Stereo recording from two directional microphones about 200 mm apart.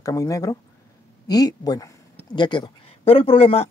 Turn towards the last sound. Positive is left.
turn(degrees=30)  # may be behind; listen again after turning